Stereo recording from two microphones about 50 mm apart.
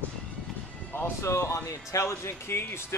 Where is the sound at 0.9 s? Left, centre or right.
Left.